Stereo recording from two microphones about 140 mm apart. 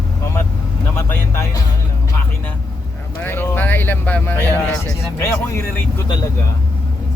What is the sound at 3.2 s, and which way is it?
Speech, 15° left (ahead or behind).